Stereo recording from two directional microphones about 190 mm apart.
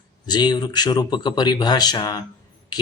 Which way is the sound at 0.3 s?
20° left (ahead or behind).